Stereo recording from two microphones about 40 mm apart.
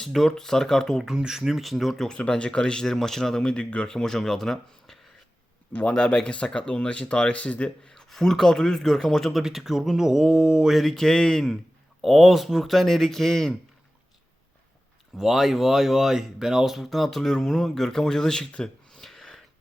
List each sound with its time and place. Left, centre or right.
0.0 s speech: centre
1.0 s speech: centre
2.0 s speech: left
2.8 s speech: centre; by 3.8 s left
3.8 s speech: centre
5.9 s speech: left
7.9 s speech: centre
9.3 s speech: centre
10.7 s speech: centre
10.9 s speech: centre
12.0 s speech: centre
15.2 s speech: centre
18.9 s a sound: centre